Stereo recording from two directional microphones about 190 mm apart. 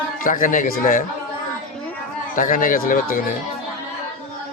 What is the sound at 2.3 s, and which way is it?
Speech, 45° left (ahead or behind).